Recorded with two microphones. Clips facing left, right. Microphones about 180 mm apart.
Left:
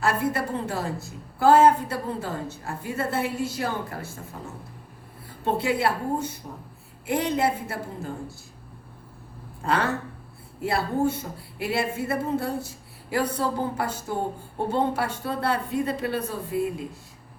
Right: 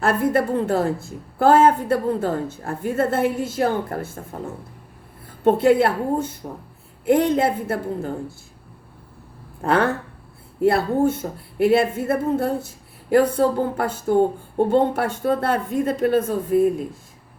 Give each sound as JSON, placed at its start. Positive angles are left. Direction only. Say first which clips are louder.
{"t": 0.0, "sound": "a woman's voice", "louder": "right 6 dB", "side_deg": -55}
{"t": 5.5, "sound": "a woman's voice", "louder": "right 8 dB", "side_deg": -50}
{"t": 9.6, "sound": "a woman's voice", "louder": "right 6 dB", "side_deg": -55}